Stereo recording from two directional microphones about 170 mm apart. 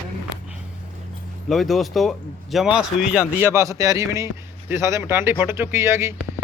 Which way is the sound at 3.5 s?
20° right (ahead or behind).